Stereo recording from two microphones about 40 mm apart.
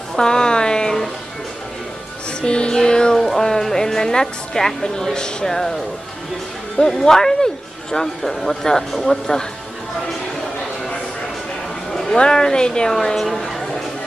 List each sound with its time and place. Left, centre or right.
0.2 s a sound: centre
2.4 s music: left
3.3 s speech: centre
6.9 s speech: centre
11.9 s a sound: centre
12.2 s a woman's voice: centre
12.9 s speech: centre